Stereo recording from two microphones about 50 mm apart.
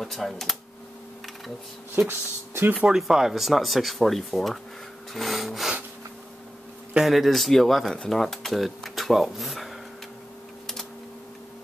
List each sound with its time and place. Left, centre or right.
0.0 s speech: centre
2.0 s speech: right
2.9 s speech: centre
7.1 s speech: centre